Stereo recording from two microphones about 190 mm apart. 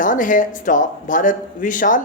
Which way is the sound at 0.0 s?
45° left (ahead or behind).